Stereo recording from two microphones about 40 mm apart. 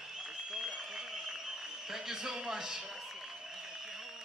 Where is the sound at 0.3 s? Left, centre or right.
Centre.